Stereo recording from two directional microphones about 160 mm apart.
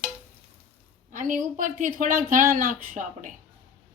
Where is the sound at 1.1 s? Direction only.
55° right (ahead or behind).